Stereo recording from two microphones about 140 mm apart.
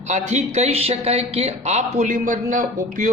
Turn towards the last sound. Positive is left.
turn(degrees=-65)  # may be behind; listen again after turning